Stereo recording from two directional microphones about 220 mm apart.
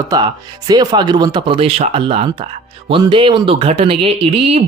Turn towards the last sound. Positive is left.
turn(degrees=-25)  # may be behind; listen again after turning